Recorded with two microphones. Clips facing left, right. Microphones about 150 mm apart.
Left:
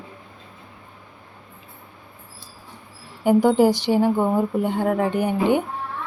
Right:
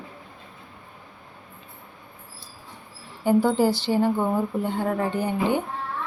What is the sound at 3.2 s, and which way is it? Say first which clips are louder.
Speech: left 4 dB; 15° left (ahead or behind).